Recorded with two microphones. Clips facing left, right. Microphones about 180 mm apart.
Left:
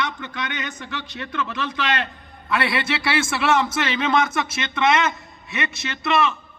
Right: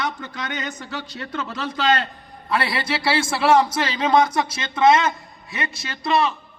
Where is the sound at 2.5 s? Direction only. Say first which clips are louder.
Even; 30° right (ahead or behind).